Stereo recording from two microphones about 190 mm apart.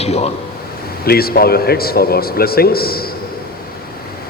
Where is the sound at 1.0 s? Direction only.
55° left (ahead or behind).